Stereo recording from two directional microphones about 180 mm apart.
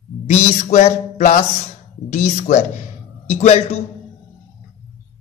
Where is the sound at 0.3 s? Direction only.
40° left (ahead or behind).